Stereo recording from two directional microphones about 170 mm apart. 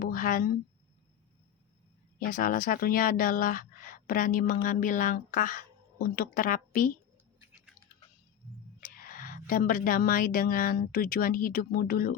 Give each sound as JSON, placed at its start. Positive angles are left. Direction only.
{"t": 0.0, "sound": "a sound", "side_deg": 55}
{"t": 2.1, "sound": "speech", "side_deg": 55}
{"t": 8.8, "sound": "a woman's voice", "side_deg": 55}